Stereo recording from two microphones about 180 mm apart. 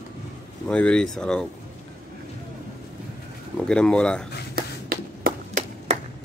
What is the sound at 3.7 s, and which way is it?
Speech, 5° left (ahead or behind).